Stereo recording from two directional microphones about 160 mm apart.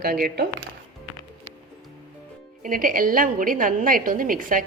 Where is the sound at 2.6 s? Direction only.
60° right (ahead or behind).